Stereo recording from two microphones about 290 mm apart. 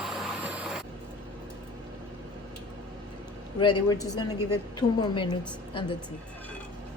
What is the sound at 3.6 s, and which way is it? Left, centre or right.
A woman's voice, centre.